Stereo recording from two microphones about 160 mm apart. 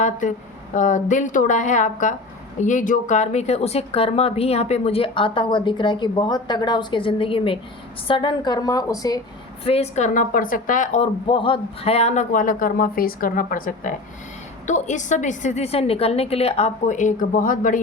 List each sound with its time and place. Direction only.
0.0 s a woman's voice: 50° left (ahead or behind); by 9.2 s 20° left (ahead or behind)
9.6 s a woman's voice: 40° left (ahead or behind)
11.3 s speech: 35° left (ahead or behind); by 13.9 s 60° left (ahead or behind)
14.7 s a woman's voice: 50° left (ahead or behind)